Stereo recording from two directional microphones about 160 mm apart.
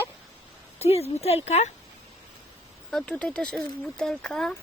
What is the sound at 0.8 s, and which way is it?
Speech, 40° left (ahead or behind).